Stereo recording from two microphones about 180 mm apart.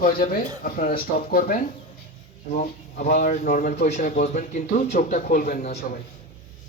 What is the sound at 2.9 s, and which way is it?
A man's voice, 50° left (ahead or behind).